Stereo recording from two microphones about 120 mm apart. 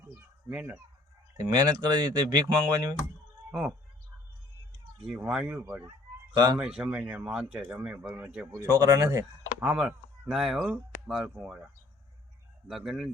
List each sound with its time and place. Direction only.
0.0 s fowl: 20° right (ahead or behind)
1.4 s speech: 30° right (ahead or behind)
3.5 s speech: 5° right (ahead or behind)
5.0 s speech: 5° right (ahead or behind)
6.3 s speech: 35° right (ahead or behind)
6.6 s speech: 5° right (ahead or behind)
8.5 s speech: 30° right (ahead or behind)
9.6 s speech: 10° right (ahead or behind)